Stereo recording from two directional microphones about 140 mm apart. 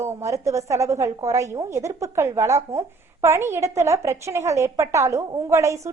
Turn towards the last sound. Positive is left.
turn(degrees=-20)  # may be behind; listen again after turning